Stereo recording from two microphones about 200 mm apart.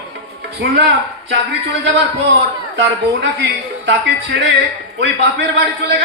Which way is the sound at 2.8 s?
65° right (ahead or behind).